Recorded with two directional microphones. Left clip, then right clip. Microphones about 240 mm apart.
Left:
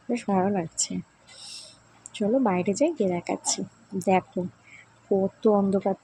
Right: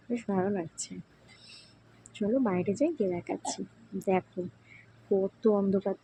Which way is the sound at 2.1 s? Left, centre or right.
Left.